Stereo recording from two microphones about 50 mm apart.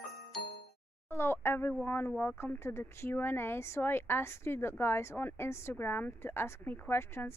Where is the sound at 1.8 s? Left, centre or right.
Left.